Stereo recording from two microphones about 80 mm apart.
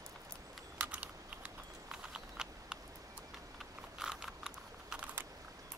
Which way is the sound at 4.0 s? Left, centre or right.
Centre.